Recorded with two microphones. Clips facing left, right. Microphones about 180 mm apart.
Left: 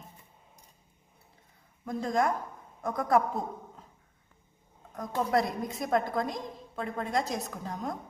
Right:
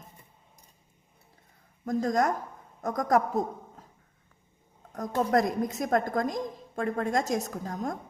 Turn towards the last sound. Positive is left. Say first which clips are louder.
# right 3 dB
turn(degrees=-45)  # may be behind; listen again after turning